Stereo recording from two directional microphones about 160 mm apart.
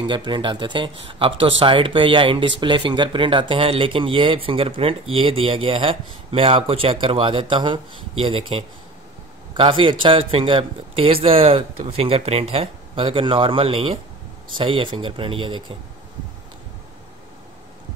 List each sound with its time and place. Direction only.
0.0 s speech: 30° right (ahead or behind)